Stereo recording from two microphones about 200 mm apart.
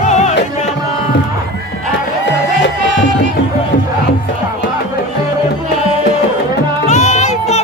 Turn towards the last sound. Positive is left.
turn(degrees=35)  # may be behind; listen again after turning